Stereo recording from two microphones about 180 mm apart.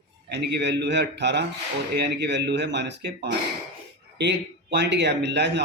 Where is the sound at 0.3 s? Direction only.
70° right (ahead or behind).